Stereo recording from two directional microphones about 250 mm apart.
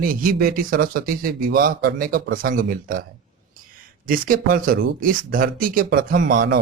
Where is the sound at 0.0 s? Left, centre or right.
Right.